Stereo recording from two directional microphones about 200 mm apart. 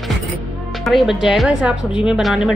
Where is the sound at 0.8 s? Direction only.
Centre (ahead or behind).